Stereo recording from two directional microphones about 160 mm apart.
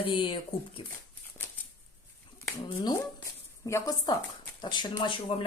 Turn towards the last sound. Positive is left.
turn(degrees=30)  # may be behind; listen again after turning